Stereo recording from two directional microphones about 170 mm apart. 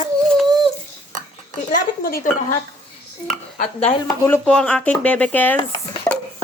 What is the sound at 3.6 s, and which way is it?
Speech, 40° left (ahead or behind).